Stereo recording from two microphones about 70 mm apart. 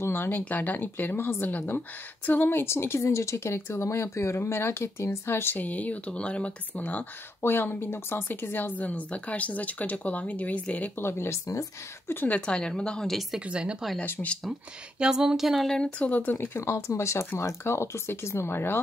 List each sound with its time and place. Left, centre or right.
0.0 s speech: left
11.0 s speech: left
12.1 s speech: left
12.4 s a woman's voice: centre
13.5 s speech: centre
15.0 s speech: centre
15.7 s speech: centre
16.3 s speech: left
16.7 s speech: left